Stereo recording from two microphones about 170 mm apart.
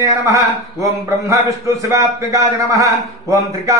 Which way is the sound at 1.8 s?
20° right (ahead or behind).